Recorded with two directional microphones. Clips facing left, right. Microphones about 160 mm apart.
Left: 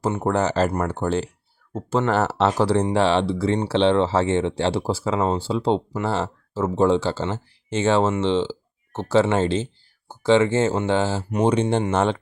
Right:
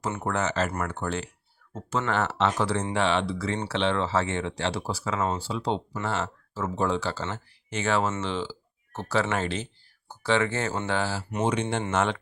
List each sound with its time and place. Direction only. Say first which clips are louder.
0.2 s speech: left 6 dB; 30° left (ahead or behind)